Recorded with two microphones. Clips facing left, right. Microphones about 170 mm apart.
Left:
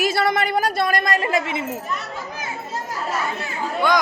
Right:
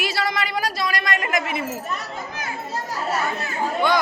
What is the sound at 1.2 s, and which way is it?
Speech, 30° left (ahead or behind).